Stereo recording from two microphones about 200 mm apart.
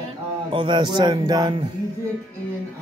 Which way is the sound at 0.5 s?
25° right (ahead or behind).